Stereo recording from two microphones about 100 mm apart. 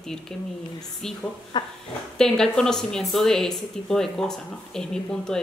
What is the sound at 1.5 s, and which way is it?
Dog, 50° left (ahead or behind).